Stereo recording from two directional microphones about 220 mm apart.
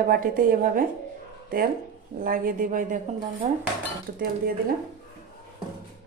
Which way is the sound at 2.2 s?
40° right (ahead or behind).